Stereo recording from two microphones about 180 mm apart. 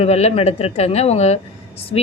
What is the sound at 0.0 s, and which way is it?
A woman's voice, 35° left (ahead or behind).